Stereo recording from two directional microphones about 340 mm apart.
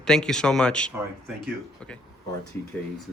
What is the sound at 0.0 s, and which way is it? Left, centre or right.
Speech, centre.